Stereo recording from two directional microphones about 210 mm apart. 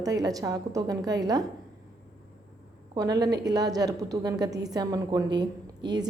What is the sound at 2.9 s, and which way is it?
A woman's voice, 20° right (ahead or behind).